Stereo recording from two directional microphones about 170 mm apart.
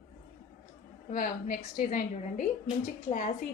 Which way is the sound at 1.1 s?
55° left (ahead or behind).